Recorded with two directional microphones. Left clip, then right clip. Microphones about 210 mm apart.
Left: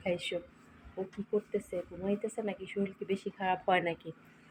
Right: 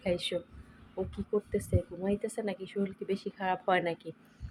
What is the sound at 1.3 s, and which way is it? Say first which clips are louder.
Speech: right 2 dB; 15° right (ahead or behind).